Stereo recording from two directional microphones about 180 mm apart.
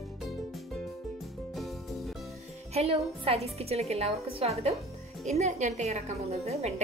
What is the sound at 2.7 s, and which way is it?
A woman's voice, 35° right (ahead or behind).